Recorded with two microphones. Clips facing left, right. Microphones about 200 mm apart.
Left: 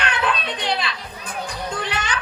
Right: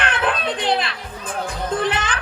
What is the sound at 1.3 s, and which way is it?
Speech, 50° right (ahead or behind).